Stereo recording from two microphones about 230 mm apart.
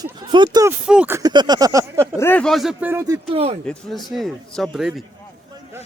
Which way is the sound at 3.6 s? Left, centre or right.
Centre.